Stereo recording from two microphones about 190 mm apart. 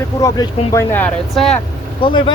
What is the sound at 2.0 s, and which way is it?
Speech, 25° left (ahead or behind).